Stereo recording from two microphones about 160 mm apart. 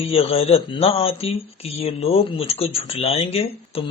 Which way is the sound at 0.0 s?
35° left (ahead or behind).